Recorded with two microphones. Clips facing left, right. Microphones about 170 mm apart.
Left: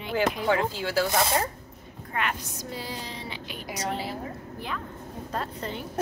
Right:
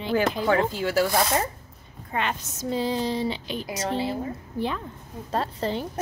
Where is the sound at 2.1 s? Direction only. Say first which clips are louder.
Right 2 dB; 25° right (ahead or behind).